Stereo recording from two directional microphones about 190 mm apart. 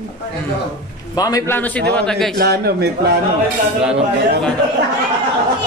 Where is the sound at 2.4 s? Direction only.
55° right (ahead or behind).